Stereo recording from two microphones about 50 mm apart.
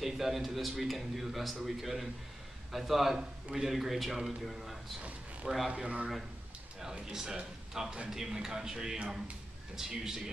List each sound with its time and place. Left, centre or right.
0.0 s a man's voice: centre
5.7 s a man's voice: right